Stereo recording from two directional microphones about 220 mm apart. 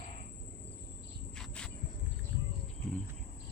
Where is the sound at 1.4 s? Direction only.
5° left (ahead or behind).